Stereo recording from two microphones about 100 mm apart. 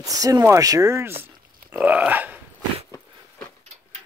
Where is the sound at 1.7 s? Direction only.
15° right (ahead or behind).